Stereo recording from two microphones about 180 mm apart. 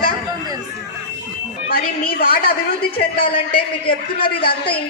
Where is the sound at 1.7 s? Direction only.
55° left (ahead or behind).